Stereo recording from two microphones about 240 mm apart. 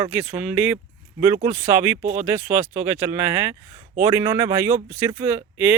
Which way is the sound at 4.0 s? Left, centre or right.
Centre.